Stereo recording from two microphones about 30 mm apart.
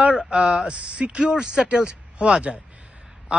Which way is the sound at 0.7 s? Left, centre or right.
Right.